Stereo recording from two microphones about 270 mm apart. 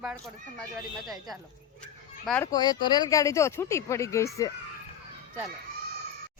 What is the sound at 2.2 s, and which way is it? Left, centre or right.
A woman's voice, centre.